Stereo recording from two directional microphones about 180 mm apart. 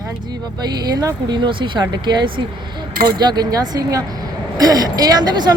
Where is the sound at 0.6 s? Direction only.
25° right (ahead or behind).